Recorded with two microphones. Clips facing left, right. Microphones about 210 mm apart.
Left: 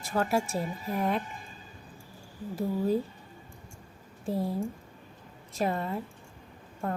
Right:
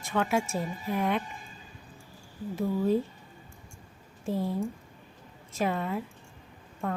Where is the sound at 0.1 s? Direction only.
35° left (ahead or behind).